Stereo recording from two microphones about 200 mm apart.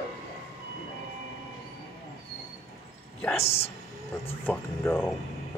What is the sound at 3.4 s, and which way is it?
Speech, 30° left (ahead or behind).